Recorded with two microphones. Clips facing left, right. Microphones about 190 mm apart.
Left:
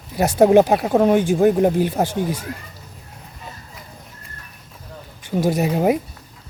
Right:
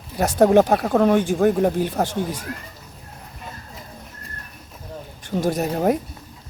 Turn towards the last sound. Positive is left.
turn(degrees=10)  # may be behind; listen again after turning